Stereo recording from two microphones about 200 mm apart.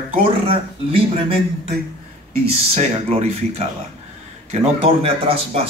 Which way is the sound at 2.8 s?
30° right (ahead or behind).